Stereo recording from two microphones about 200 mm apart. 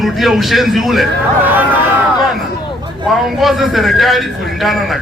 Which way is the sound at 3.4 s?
Centre (ahead or behind).